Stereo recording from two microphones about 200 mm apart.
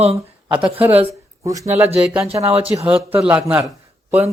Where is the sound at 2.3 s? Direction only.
10° right (ahead or behind).